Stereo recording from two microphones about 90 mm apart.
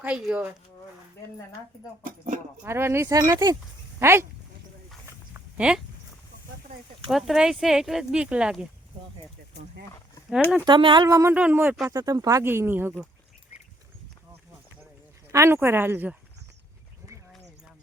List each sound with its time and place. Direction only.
0.0 s speech: 15° right (ahead or behind)
2.6 s speech: 30° right (ahead or behind)
3.2 s a sound: 35° right (ahead or behind)
4.0 s speech: 30° right (ahead or behind)
5.3 s a sound: 10° right (ahead or behind)
7.1 s speech: centre (ahead or behind)
10.7 s speech: 60° right (ahead or behind)
11.0 s a sound: 40° right (ahead or behind)
11.3 s speech: 20° right (ahead or behind)
11.9 s speech: 45° right (ahead or behind)
12.4 s speech: 30° right (ahead or behind)
15.3 s speech: 30° right (ahead or behind)